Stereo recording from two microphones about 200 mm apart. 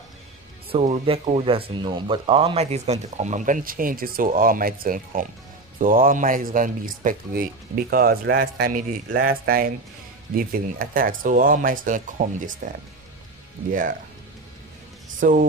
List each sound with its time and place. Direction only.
0.7 s speech: 30° right (ahead or behind)
13.7 s speech: 45° right (ahead or behind)
15.1 s speech: 40° right (ahead or behind)